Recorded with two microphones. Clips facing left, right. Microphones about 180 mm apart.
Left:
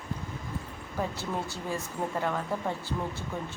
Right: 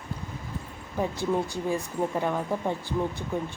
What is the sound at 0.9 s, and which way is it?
Speech, 15° right (ahead or behind).